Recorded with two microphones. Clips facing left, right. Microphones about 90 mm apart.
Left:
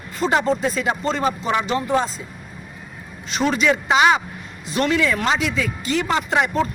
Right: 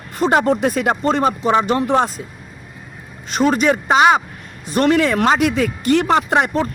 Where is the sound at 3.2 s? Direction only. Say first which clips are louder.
Right 4 dB; 45° right (ahead or behind).